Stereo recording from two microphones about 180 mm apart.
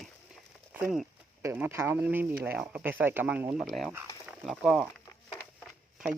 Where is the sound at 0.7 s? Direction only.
5° right (ahead or behind).